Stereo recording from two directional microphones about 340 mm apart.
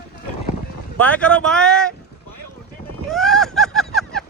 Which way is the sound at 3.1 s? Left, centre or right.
Centre.